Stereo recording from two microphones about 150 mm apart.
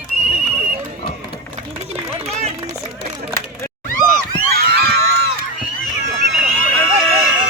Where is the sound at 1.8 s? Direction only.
45° right (ahead or behind).